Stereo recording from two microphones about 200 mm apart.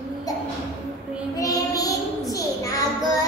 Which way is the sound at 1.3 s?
15° left (ahead or behind).